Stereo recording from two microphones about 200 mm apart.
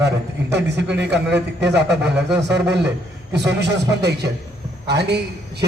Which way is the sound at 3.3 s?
55° right (ahead or behind).